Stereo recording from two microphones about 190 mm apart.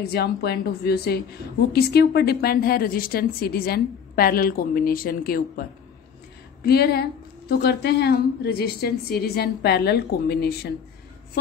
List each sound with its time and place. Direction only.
0.0 s a woman's voice: 60° left (ahead or behind)
6.6 s a woman's voice: 55° left (ahead or behind)